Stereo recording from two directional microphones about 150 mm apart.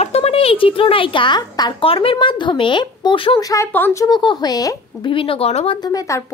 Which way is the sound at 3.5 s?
15° left (ahead or behind).